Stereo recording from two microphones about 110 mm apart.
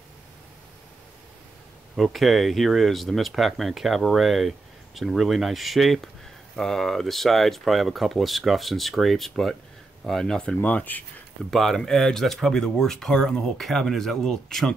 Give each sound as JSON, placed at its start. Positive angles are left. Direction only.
{"t": 2.0, "sound": "speech", "side_deg": 0}
{"t": 11.5, "sound": "speech", "side_deg": 5}